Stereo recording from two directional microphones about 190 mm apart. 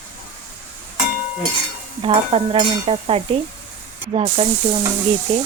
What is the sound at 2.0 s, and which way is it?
Stir, 30° right (ahead or behind).